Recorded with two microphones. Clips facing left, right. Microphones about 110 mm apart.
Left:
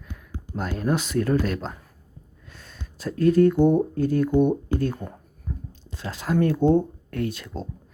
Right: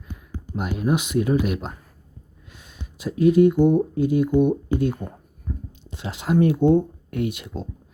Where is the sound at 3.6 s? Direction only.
10° right (ahead or behind).